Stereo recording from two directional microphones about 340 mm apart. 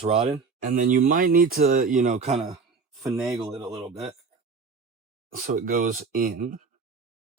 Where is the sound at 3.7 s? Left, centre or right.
Centre.